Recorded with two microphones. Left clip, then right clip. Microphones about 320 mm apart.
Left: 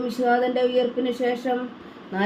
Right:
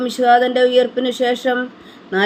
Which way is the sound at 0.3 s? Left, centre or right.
Right.